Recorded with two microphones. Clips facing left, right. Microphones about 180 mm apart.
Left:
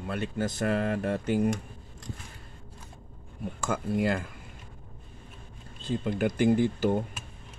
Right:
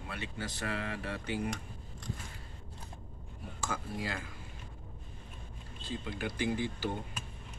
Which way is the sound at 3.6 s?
55° left (ahead or behind).